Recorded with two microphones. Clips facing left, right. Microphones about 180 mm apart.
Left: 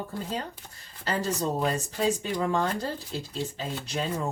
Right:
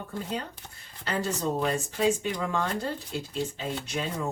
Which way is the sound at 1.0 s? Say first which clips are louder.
Left 1 dB; 35° left (ahead or behind).